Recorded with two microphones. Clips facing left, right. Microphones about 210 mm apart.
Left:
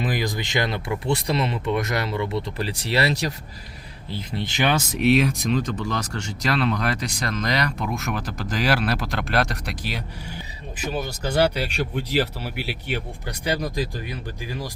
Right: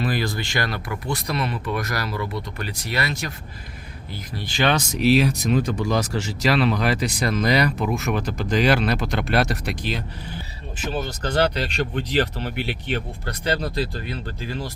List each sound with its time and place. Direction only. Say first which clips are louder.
0.0 s speech: right 1 dB; 15° left (ahead or behind); by 3.3 s 35° left (ahead or behind)
4.1 s speech: left 4 dB; 20° left (ahead or behind)
4.7 s speech: right 1 dB; centre (ahead or behind)
9.8 s speech: right 3 dB; 10° left (ahead or behind)